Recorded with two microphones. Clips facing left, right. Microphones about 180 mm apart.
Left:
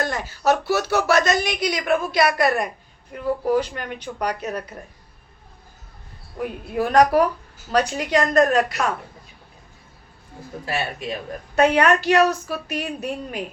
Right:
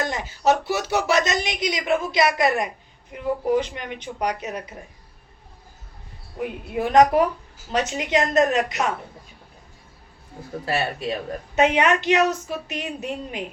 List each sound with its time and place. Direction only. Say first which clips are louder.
0.0 s a woman's voice: even; 20° right (ahead or behind)
6.7 s a woman's voice: even; 20° right (ahead or behind)
10.7 s speech: right 2 dB; 35° right (ahead or behind)
11.5 s a woman's voice: left 2 dB; 20° right (ahead or behind)